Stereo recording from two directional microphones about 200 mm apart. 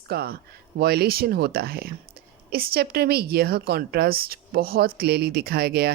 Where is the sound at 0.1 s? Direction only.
50° right (ahead or behind).